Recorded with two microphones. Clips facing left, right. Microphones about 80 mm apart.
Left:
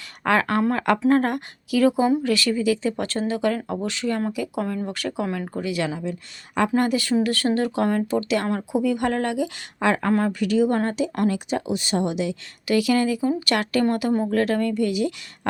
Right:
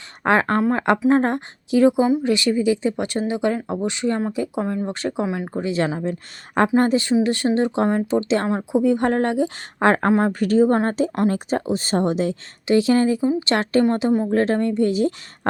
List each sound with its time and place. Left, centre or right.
0.2 s speech: right
6.7 s a woman's voice: right